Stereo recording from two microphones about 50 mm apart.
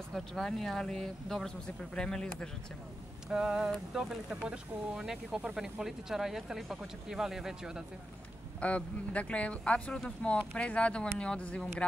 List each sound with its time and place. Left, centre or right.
0.1 s speech: centre
3.3 s speech: centre
8.5 s speech: left